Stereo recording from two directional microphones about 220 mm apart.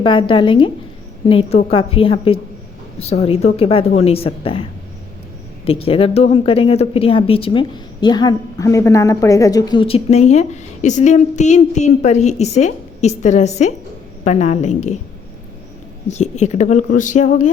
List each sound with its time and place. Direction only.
0.0 s speech: 25° left (ahead or behind)
5.6 s speech: 25° left (ahead or behind)
16.0 s speech: 30° left (ahead or behind)